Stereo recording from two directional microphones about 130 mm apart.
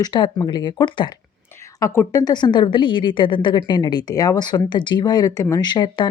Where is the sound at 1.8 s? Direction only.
25° left (ahead or behind).